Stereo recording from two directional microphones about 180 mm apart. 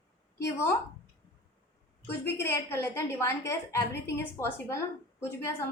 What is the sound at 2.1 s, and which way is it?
A woman's voice, 15° left (ahead or behind).